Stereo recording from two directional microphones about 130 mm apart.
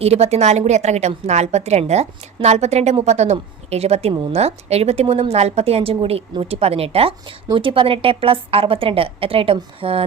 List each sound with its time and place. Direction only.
0.0 s a woman's voice: 55° right (ahead or behind)